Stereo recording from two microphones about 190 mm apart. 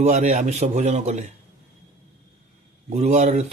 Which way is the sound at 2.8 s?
35° right (ahead or behind).